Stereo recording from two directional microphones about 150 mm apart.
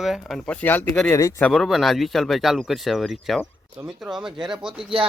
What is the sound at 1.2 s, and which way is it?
Speech, 20° left (ahead or behind).